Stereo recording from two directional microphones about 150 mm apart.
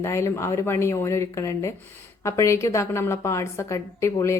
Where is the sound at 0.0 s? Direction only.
20° left (ahead or behind).